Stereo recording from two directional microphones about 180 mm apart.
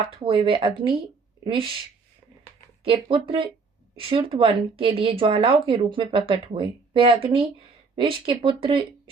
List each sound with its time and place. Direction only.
0.0 s speech: 30° right (ahead or behind)
2.8 s speech: 30° right (ahead or behind)